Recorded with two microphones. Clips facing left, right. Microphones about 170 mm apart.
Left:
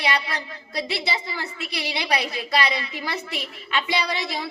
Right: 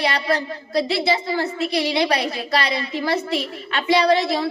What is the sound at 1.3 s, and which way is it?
A woman's voice, 35° right (ahead or behind).